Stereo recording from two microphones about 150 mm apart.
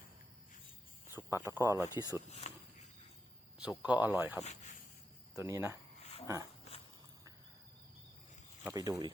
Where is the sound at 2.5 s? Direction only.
50° left (ahead or behind).